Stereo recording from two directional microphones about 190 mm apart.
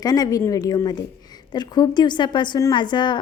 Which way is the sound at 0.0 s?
20° left (ahead or behind).